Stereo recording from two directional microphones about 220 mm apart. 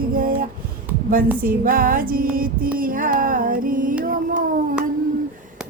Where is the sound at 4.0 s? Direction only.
40° right (ahead or behind).